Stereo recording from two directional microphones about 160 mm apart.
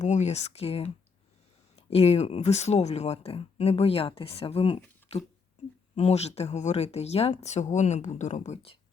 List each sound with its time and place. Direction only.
0.0 s speech: 45° left (ahead or behind)
6.0 s speech: 40° left (ahead or behind)